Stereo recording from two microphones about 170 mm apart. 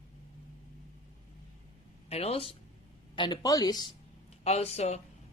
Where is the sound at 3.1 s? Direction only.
25° left (ahead or behind).